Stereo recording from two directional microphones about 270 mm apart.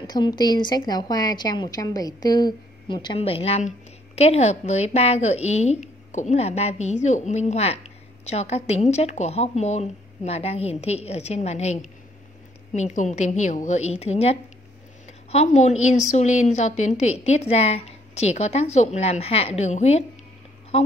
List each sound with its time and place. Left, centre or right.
0.0 s a woman's voice: centre